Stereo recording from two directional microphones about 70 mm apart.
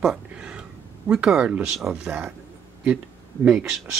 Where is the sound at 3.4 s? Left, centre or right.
Centre.